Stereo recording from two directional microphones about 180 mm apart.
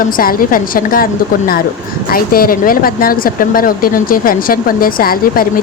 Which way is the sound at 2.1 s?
55° left (ahead or behind).